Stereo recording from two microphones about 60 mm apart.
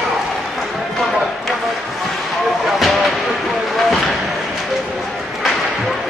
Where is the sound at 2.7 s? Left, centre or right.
Centre.